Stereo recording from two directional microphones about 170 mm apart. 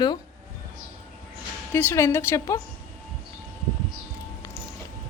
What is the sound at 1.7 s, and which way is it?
Speech, 15° left (ahead or behind).